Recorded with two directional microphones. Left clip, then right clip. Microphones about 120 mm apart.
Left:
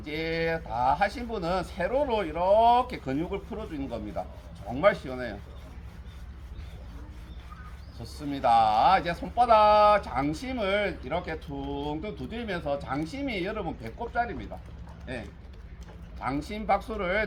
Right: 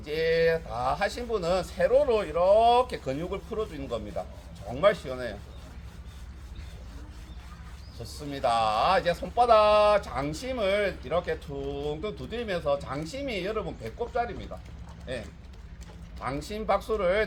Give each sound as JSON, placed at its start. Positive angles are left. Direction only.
{"t": 0.0, "sound": "speech", "side_deg": -25}
{"t": 8.0, "sound": "speech", "side_deg": -25}